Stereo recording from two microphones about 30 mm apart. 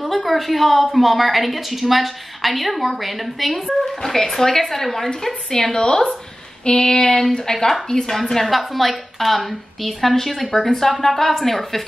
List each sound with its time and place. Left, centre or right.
0.0 s a woman's voice: centre
5.5 s a sound: left
7.9 s speech: centre
8.5 s a woman's voice: centre